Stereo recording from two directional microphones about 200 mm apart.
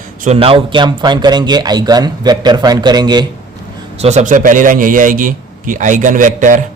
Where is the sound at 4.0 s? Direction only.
35° right (ahead or behind).